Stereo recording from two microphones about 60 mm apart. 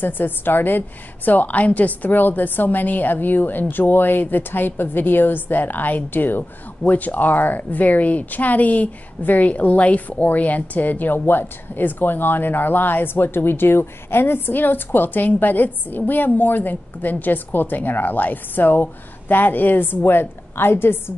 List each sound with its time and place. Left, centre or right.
0.0 s a woman's voice: left